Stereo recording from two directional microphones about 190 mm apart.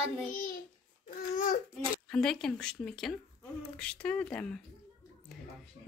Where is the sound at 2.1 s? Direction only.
5° left (ahead or behind).